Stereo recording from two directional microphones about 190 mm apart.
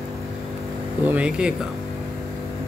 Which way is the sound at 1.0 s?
5° right (ahead or behind).